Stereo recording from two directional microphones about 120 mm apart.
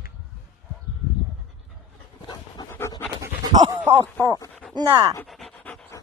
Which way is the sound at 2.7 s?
20° left (ahead or behind).